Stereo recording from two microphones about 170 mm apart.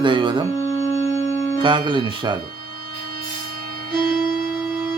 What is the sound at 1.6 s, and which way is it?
Speech, 30° right (ahead or behind).